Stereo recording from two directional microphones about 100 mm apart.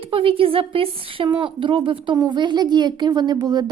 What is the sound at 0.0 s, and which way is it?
A woman's voice, 65° right (ahead or behind).